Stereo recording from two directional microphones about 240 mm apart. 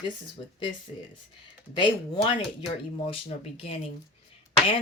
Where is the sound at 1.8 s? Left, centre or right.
Centre.